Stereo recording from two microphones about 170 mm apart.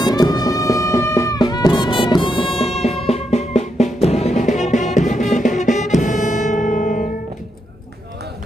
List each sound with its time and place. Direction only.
0.0 s music: 25° left (ahead or behind); by 7.1 s 50° left (ahead or behind)